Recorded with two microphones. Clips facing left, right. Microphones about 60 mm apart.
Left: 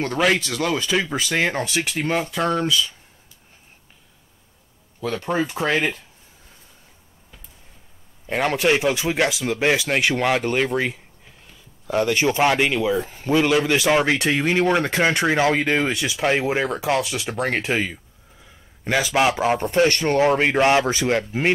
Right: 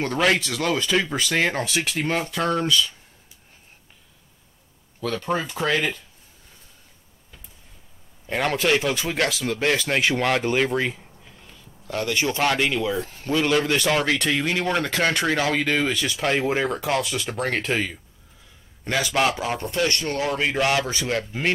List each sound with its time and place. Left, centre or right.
0.0 s speech: centre
5.0 s a man's voice: centre
8.3 s a man's voice: centre; by 15.9 s left
15.9 s a man's voice: centre
19.3 s speech: left